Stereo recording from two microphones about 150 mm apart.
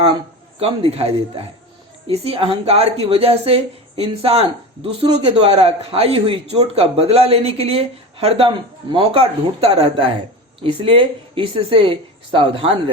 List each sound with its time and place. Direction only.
0.6 s a woman's voice: 40° right (ahead or behind)